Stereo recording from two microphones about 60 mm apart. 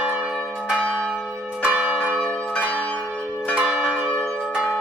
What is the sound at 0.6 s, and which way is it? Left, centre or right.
Church bell, centre.